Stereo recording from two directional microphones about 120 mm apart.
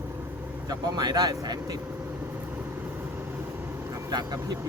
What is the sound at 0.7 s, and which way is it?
Speech, 30° right (ahead or behind).